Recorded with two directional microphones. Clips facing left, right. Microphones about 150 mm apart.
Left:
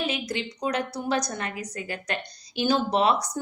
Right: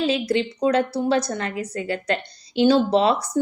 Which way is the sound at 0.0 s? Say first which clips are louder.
Right 8 dB; 30° right (ahead or behind).